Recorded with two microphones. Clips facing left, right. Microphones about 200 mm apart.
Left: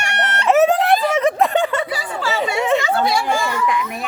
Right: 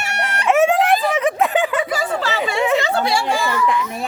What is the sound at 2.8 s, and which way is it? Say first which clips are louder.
Chatter: even; 30° right (ahead or behind).